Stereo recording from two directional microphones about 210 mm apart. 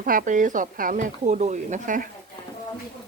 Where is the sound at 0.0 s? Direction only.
40° right (ahead or behind).